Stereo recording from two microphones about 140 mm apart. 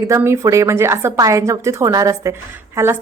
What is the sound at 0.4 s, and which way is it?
Speech, 20° right (ahead or behind).